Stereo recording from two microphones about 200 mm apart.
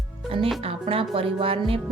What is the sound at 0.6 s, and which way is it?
A woman's voice, 30° right (ahead or behind).